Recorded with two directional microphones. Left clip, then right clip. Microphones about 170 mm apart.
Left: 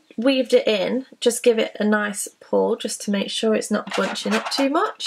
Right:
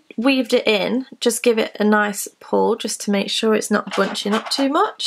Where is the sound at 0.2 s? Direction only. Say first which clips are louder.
Even; 30° right (ahead or behind).